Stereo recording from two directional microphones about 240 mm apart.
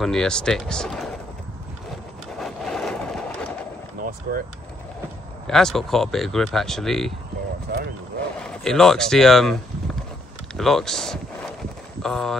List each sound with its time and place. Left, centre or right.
0.0 s speech: centre
2.3 s wood: centre
5.5 s speech: centre
7.7 s speech: right
8.4 s speech: centre